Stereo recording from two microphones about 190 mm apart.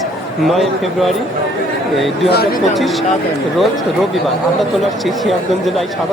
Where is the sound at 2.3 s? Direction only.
55° left (ahead or behind).